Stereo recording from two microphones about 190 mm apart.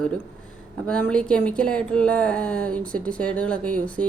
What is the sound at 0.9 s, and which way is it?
A woman's voice, 5° left (ahead or behind).